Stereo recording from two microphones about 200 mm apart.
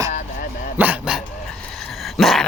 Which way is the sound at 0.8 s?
10° right (ahead or behind).